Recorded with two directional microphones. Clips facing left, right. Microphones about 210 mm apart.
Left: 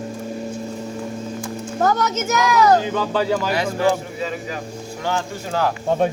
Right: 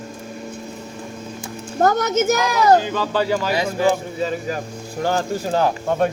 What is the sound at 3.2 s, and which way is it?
Speech, 10° right (ahead or behind).